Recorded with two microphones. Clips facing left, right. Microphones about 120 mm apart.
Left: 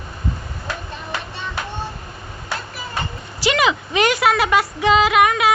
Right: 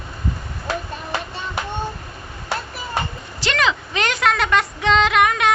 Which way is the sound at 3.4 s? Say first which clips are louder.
Left 3 dB; 10° left (ahead or behind).